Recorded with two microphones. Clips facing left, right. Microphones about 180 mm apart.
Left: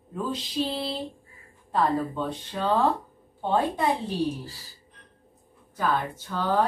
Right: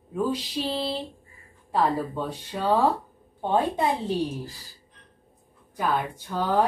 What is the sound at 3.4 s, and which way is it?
Speech, 20° right (ahead or behind).